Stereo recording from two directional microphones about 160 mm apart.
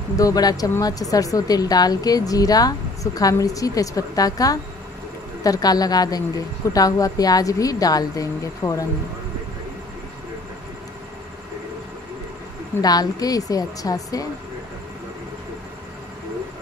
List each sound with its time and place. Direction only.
0.2 s speech: 25° left (ahead or behind)
12.8 s speech: 25° left (ahead or behind)